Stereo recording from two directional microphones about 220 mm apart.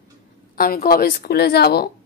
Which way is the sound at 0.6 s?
40° left (ahead or behind).